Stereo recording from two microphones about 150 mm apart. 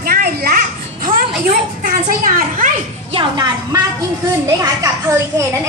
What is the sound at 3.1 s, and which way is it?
A child's voice, 25° right (ahead or behind).